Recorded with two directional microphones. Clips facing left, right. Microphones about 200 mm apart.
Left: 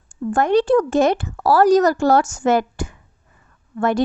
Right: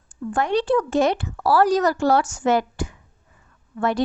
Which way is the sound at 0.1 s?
45° left (ahead or behind).